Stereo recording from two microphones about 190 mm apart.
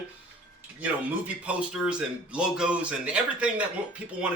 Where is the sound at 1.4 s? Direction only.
5° right (ahead or behind).